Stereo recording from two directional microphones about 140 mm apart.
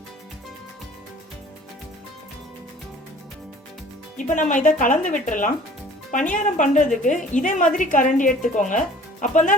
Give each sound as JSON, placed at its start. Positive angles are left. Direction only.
{"t": 4.4, "sound": "a woman's voice", "side_deg": 65}